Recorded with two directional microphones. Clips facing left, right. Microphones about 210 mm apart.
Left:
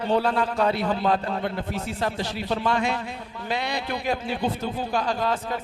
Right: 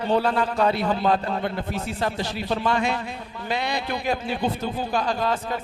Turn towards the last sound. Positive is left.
turn(degrees=-20)  # may be behind; listen again after turning